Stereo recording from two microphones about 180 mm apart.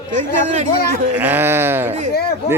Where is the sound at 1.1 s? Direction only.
10° right (ahead or behind).